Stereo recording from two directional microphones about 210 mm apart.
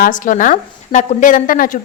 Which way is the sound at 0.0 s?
40° left (ahead or behind).